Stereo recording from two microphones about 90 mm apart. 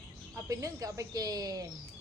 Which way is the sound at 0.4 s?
35° right (ahead or behind).